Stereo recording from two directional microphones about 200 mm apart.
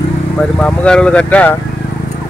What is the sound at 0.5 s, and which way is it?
Speech, 5° left (ahead or behind).